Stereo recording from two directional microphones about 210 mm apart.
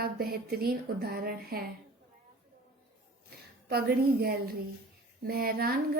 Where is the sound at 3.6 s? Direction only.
45° right (ahead or behind).